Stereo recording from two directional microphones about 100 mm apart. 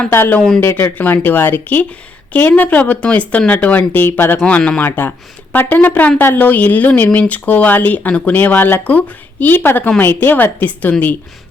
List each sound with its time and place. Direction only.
0.1 s speech: 25° left (ahead or behind)
0.3 s speech: 5° left (ahead or behind)
0.6 s a woman's voice: 25° left (ahead or behind)